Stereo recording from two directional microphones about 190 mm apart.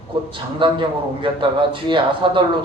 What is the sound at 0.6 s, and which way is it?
Speech, 25° right (ahead or behind).